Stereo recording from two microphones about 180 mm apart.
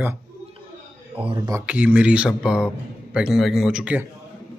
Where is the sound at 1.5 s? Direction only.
10° right (ahead or behind).